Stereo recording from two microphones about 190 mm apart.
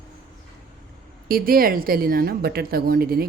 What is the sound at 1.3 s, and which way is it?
Speech, 50° right (ahead or behind).